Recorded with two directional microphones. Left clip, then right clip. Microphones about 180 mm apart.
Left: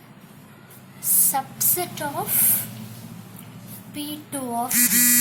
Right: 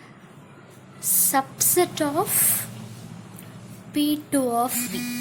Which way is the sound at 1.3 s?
40° right (ahead or behind).